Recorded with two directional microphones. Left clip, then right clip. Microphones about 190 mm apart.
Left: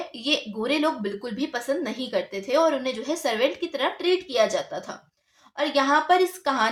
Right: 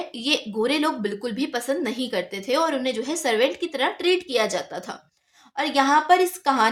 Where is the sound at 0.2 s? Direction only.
40° right (ahead or behind).